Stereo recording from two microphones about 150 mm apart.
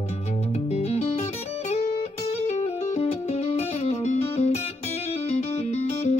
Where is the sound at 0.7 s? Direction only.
45° left (ahead or behind).